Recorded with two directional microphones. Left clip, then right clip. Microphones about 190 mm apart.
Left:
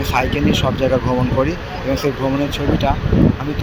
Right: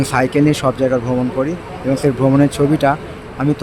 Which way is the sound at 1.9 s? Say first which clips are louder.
Right 4 dB; 25° right (ahead or behind).